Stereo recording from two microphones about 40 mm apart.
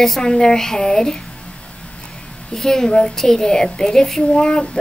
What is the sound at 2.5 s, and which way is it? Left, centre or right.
A child's voice, centre.